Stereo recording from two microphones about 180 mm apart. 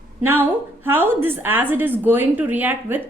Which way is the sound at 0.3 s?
10° right (ahead or behind).